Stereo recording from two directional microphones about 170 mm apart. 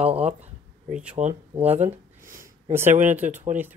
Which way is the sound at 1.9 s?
15° right (ahead or behind).